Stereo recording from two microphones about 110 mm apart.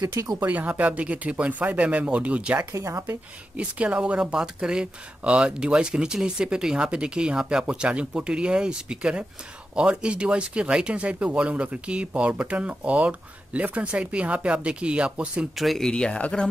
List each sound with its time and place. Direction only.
0.0 s speech: 35° right (ahead or behind)
0.4 s speech: 15° right (ahead or behind)
2.7 s a woman's voice: 25° right (ahead or behind)
3.5 s speech: 10° right (ahead or behind)
15.6 s speech: 5° left (ahead or behind)